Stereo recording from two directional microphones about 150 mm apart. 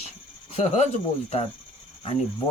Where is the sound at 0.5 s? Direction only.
45° left (ahead or behind).